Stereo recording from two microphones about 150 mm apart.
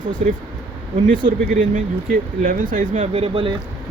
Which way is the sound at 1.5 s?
65° right (ahead or behind).